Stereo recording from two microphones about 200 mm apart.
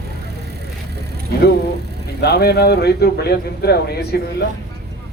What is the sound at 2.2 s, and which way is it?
Speech, 55° left (ahead or behind).